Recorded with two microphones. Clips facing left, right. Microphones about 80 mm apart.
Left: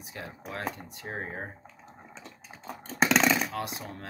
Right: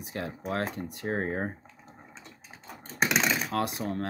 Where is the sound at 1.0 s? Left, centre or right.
Right.